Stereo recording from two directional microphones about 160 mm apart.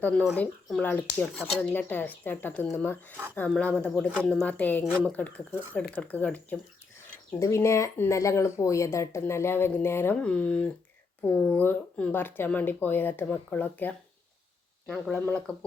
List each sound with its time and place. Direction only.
0.0 s speech: 5° left (ahead or behind)